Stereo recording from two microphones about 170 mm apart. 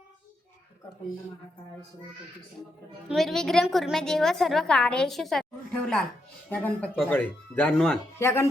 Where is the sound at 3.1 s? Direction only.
Centre (ahead or behind).